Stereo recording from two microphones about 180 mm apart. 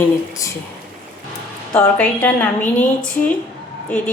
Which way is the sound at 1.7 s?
10° left (ahead or behind).